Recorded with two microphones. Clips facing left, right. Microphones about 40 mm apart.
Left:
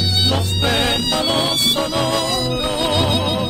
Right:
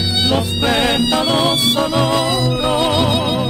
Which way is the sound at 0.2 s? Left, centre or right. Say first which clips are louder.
Right 4 dB; centre.